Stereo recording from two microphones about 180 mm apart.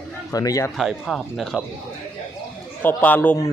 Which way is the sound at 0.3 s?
20° left (ahead or behind).